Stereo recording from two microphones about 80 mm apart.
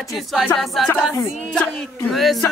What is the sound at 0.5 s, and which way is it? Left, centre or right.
Music, centre.